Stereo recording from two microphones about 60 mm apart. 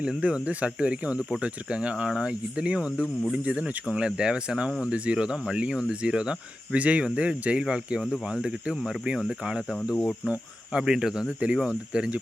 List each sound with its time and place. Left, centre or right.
0.0 s speech: centre
9.9 s cricket: centre
10.8 s speech: centre
11.3 s speech: right